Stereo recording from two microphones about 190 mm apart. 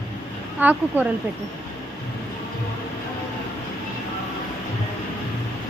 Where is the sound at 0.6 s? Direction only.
10° right (ahead or behind).